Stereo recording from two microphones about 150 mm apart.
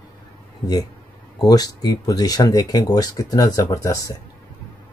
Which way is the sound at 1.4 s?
25° left (ahead or behind).